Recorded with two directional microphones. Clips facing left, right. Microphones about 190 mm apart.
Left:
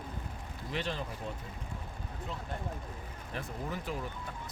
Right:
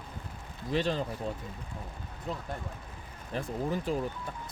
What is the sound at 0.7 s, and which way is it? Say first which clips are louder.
Speech: right 7 dB; 35° right (ahead or behind).